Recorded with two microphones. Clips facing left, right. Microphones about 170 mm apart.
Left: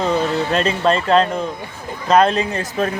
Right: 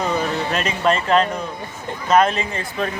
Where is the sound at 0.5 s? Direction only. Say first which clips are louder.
Left 2 dB; 35° left (ahead or behind).